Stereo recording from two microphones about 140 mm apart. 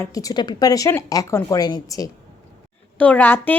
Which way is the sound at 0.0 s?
25° left (ahead or behind).